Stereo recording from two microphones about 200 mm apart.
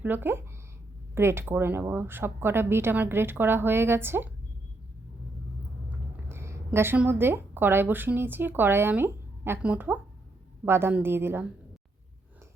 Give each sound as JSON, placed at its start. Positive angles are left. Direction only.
{"t": 0.0, "sound": "speech", "side_deg": -10}
{"t": 6.2, "sound": "a woman's voice", "side_deg": -15}